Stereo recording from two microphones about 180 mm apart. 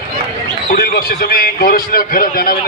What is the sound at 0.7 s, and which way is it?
A man's voice, 55° left (ahead or behind).